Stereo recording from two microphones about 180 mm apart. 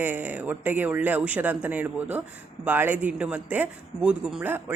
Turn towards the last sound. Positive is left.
turn(degrees=-10)  # may be behind; listen again after turning